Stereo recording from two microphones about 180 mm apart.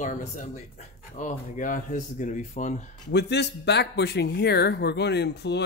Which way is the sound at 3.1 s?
70° left (ahead or behind).